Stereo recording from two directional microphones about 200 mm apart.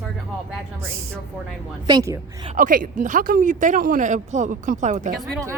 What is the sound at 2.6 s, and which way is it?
Speech, 45° right (ahead or behind).